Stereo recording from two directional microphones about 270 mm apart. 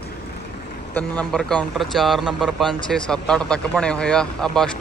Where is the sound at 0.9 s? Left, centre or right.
Centre.